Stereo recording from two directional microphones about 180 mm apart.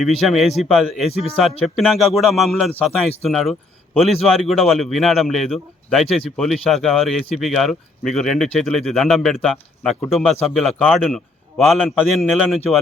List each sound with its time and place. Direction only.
0.2 s speech: centre (ahead or behind)
1.0 s a man's voice: 35° left (ahead or behind)
1.6 s speech: centre (ahead or behind)